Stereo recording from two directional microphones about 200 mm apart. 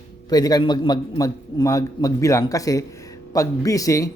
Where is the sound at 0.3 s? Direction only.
20° left (ahead or behind).